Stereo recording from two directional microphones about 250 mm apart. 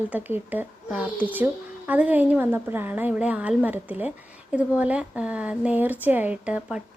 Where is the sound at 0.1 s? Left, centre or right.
Centre.